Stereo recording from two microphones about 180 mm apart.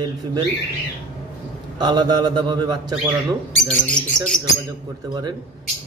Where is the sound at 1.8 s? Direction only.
25° right (ahead or behind).